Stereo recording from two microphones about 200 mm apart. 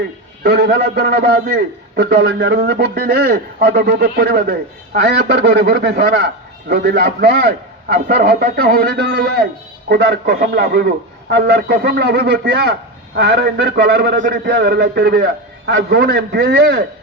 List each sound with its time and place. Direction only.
0.4 s a man's voice: 55° right (ahead or behind)
14.2 s a man's voice: 40° right (ahead or behind)
14.5 s a man's voice: 50° right (ahead or behind)